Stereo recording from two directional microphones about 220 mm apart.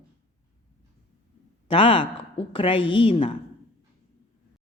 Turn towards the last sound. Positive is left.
turn(degrees=25)  # may be behind; listen again after turning